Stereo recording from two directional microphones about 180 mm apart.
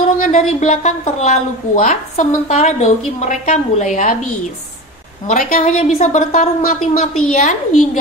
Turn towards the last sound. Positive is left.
turn(degrees=45)  # may be behind; listen again after turning